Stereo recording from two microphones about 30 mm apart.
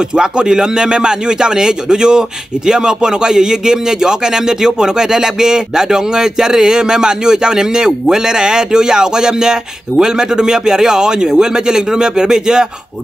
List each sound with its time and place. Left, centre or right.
0.1 s speech: right